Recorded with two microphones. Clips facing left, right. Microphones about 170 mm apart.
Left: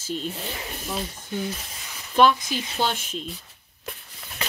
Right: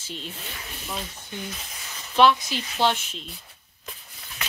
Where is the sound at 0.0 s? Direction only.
40° left (ahead or behind).